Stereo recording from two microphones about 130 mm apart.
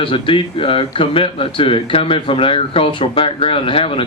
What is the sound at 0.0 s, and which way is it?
Speech, 45° left (ahead or behind).